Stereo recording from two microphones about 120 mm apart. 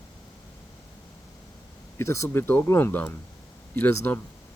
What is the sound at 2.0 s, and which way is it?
Speech, 25° left (ahead or behind).